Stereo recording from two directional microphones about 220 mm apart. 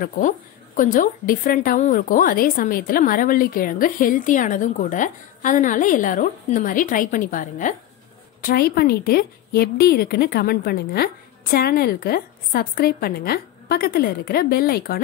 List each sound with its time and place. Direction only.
0.7 s a woman's voice: 35° left (ahead or behind)